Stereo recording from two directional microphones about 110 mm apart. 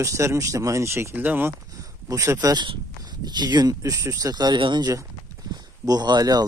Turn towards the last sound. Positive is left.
turn(degrees=-35)  # may be behind; listen again after turning